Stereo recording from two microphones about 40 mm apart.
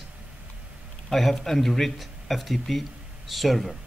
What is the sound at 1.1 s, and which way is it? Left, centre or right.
Speech, centre.